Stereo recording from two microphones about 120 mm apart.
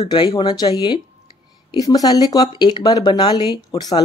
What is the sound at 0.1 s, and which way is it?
Speech, 40° left (ahead or behind).